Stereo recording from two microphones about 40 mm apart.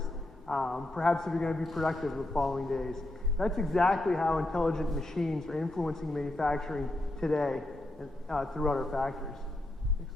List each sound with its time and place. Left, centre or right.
0.0 s a man's voice: centre
1.6 s a man's voice: centre